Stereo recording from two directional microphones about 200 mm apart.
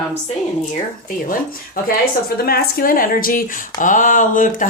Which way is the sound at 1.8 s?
50° left (ahead or behind).